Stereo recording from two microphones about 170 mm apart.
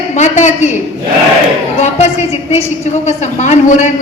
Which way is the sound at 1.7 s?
40° left (ahead or behind).